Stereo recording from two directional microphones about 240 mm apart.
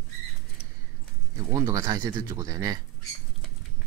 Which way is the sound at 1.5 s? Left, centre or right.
Centre.